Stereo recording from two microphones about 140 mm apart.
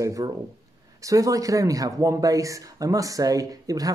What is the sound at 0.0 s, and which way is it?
Speech, 25° right (ahead or behind).